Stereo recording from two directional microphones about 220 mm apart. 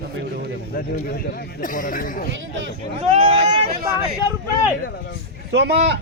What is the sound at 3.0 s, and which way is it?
Speech, 25° right (ahead or behind).